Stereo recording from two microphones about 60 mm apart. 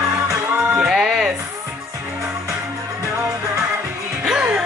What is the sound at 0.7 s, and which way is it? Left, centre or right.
Music, centre.